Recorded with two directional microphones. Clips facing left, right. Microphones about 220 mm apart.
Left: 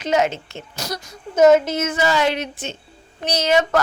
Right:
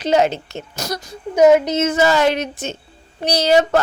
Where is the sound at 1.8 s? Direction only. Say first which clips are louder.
Right 4 dB; 40° right (ahead or behind).